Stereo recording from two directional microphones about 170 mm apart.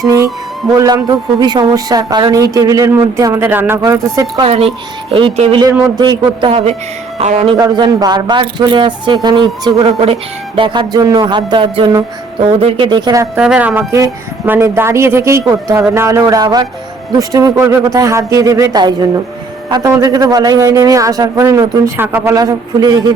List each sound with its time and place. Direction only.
0.0 s music: 20° right (ahead or behind)
0.8 s speech: 20° right (ahead or behind)
4.4 s speech: 35° right (ahead or behind)
7.5 s speech: 25° right (ahead or behind)
13.3 s speech: 5° right (ahead or behind)